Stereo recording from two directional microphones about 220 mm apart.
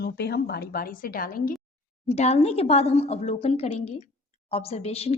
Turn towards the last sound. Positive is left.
turn(degrees=30)  # may be behind; listen again after turning